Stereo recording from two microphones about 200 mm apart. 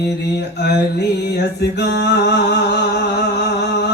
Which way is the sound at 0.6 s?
55° left (ahead or behind).